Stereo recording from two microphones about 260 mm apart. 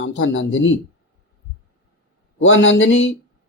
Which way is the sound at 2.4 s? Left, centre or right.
Left.